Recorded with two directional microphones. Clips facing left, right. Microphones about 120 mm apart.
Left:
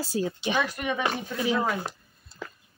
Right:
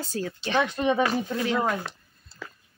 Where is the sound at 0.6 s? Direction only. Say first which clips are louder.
Right 6 dB; 30° right (ahead or behind).